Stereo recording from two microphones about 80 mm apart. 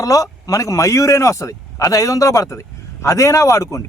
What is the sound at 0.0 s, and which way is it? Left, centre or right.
A man's voice, left.